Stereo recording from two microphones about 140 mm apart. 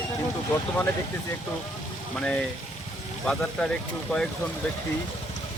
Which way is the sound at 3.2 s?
5° left (ahead or behind).